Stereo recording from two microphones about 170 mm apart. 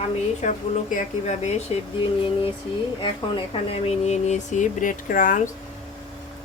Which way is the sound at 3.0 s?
30° left (ahead or behind).